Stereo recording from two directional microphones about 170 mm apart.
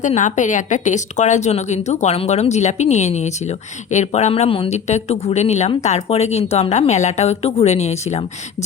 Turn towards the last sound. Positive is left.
turn(degrees=40)  # may be behind; listen again after turning